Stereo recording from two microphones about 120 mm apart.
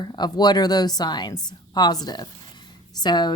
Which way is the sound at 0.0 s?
35° left (ahead or behind).